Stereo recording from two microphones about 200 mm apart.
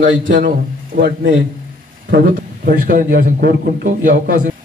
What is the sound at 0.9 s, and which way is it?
A man's voice, 55° right (ahead or behind).